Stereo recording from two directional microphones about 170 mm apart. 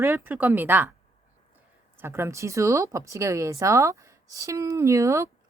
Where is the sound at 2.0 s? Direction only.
15° right (ahead or behind).